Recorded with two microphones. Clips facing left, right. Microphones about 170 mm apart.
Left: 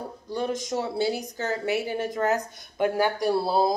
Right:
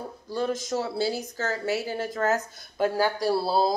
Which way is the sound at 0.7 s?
20° left (ahead or behind).